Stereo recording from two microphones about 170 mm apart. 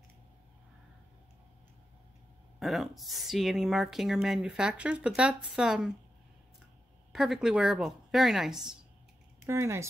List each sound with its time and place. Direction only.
2.6 s speech: centre (ahead or behind)
7.1 s speech: centre (ahead or behind)
9.5 s speech: 15° right (ahead or behind)